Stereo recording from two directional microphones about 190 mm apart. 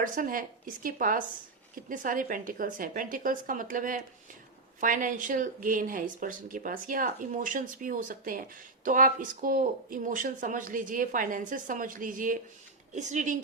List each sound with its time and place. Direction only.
0.0 s speech: 45° right (ahead or behind)